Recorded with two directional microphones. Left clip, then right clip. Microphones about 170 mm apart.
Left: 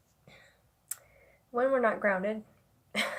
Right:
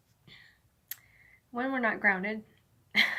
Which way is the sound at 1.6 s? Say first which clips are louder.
Left 1 dB; 35° left (ahead or behind).